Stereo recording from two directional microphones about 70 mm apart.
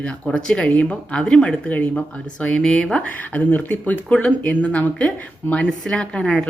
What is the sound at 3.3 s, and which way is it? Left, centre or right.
Speech, left.